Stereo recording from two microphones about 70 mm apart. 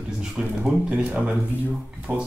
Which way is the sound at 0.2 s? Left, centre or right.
Centre.